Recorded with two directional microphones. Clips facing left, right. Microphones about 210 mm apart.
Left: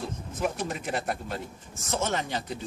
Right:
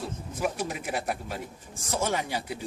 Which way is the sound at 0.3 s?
10° right (ahead or behind).